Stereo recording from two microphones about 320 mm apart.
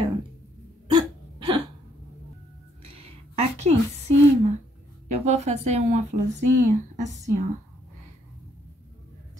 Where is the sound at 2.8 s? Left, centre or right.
Centre.